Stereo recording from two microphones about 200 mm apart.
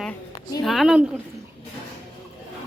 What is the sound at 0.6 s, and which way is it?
Speech, centre (ahead or behind).